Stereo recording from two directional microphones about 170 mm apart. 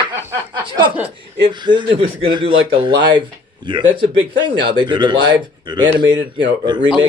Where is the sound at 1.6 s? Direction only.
30° right (ahead or behind).